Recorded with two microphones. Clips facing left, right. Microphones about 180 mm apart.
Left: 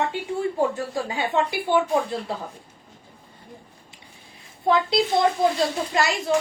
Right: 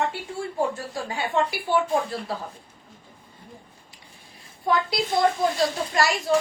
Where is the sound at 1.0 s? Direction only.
20° left (ahead or behind).